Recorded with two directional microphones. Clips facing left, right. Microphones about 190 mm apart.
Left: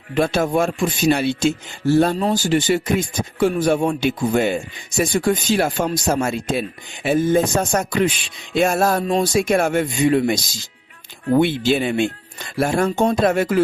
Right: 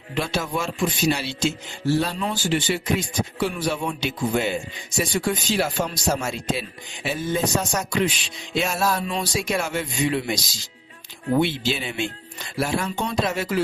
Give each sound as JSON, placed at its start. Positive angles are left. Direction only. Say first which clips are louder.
{"t": 0.1, "sound": "speech", "louder": "left 8 dB", "side_deg": 50}